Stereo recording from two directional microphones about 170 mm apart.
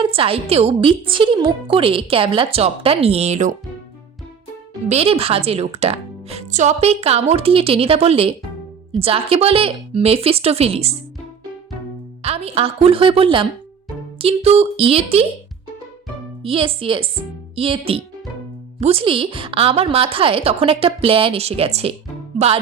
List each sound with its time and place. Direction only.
0.0 s a woman's voice: 35° right (ahead or behind)
4.9 s a woman's voice: 35° right (ahead or behind)
12.2 s a woman's voice: 35° right (ahead or behind)
16.4 s a woman's voice: 30° right (ahead or behind)